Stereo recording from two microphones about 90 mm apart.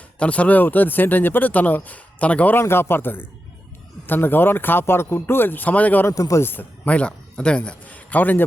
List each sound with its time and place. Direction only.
0.2 s speech: 15° left (ahead or behind)
2.6 s speech: 30° left (ahead or behind)
6.1 s speech: 35° left (ahead or behind)